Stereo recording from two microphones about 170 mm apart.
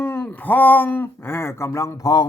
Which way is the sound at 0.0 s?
10° left (ahead or behind).